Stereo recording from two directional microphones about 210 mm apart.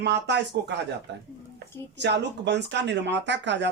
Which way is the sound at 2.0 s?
55° right (ahead or behind).